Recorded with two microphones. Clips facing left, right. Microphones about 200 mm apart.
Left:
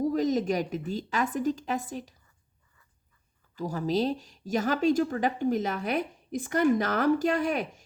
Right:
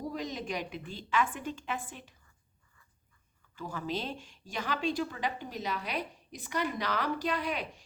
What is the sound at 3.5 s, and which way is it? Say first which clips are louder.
Speech: left 8 dB; 40° left (ahead or behind).